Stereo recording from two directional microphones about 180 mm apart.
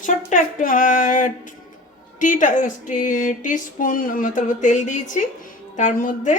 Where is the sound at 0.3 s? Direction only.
45° left (ahead or behind).